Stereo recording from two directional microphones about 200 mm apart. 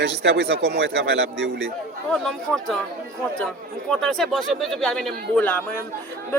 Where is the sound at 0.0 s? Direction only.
60° right (ahead or behind).